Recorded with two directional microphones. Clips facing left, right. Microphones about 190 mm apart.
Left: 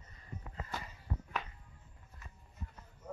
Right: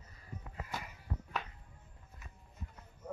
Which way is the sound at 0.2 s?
10° right (ahead or behind).